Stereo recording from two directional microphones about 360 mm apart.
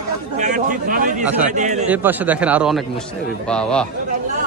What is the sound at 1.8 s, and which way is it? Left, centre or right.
A man's voice, centre.